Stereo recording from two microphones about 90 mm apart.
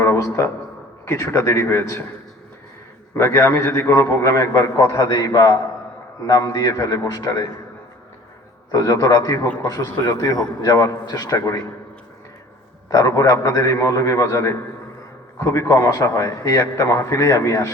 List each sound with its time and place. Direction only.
0.0 s a sound: 35° left (ahead or behind)
1.0 s a man's voice: 30° left (ahead or behind)
3.2 s a man's voice: 30° left (ahead or behind)
8.7 s a man's voice: 45° left (ahead or behind)
12.9 s a man's voice: 40° left (ahead or behind)